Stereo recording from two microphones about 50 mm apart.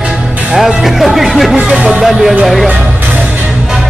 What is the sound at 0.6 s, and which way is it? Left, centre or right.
Speech, centre.